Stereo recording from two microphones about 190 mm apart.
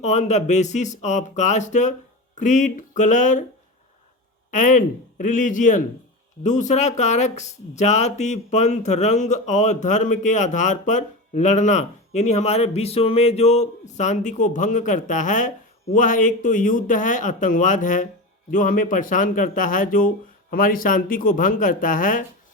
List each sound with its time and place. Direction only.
0.0 s speech: 35° left (ahead or behind)
4.5 s speech: 45° left (ahead or behind)